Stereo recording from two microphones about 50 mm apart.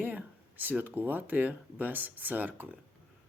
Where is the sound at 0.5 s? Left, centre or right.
Right.